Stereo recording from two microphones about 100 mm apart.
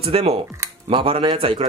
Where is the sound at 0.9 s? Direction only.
60° right (ahead or behind).